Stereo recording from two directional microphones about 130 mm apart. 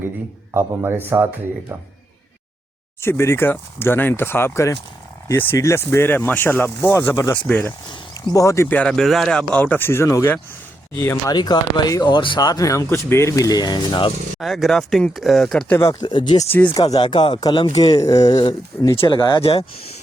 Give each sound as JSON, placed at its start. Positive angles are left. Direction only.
{"t": 0.5, "sound": "speech", "side_deg": -20}
{"t": 3.0, "sound": "speech", "side_deg": 20}
{"t": 7.9, "sound": "speech", "side_deg": 25}
{"t": 11.3, "sound": "speech", "side_deg": 30}
{"t": 14.3, "sound": "speech", "side_deg": 0}
{"t": 15.7, "sound": "speech", "side_deg": 25}
{"t": 16.5, "sound": "speech", "side_deg": 15}
{"t": 16.7, "sound": "speech", "side_deg": 30}